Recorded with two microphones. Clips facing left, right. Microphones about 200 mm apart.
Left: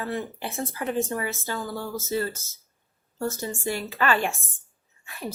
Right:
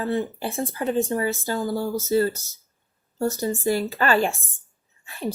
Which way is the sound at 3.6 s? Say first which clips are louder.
Right 3 dB; 35° right (ahead or behind).